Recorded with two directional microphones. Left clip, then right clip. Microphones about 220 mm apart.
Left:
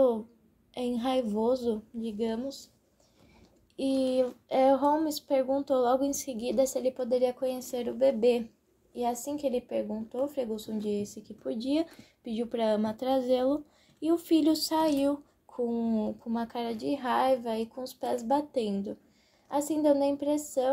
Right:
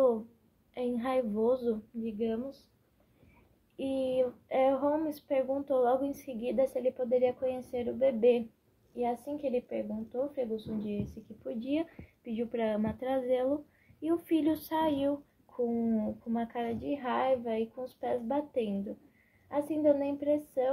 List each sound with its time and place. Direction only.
0.7 s speech: 40° left (ahead or behind)
3.7 s speech: 45° left (ahead or behind)